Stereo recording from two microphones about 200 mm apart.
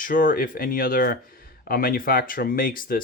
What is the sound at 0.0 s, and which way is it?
Speech, 45° left (ahead or behind).